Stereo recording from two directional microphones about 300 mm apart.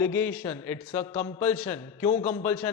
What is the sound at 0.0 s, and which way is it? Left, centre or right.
A man's voice, centre.